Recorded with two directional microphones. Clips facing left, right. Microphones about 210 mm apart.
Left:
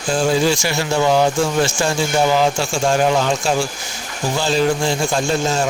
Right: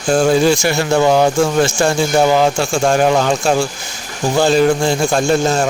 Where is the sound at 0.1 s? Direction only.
55° right (ahead or behind).